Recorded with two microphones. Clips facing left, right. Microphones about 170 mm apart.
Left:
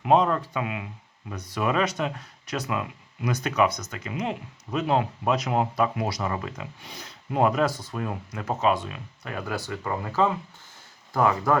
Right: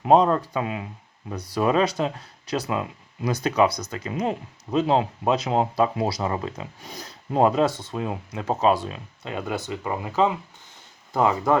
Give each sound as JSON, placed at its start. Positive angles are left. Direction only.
{"t": 0.0, "sound": "speech", "side_deg": -35}
{"t": 6.8, "sound": "speech", "side_deg": -40}